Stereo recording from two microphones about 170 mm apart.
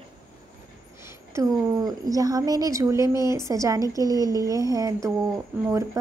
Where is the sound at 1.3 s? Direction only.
20° right (ahead or behind).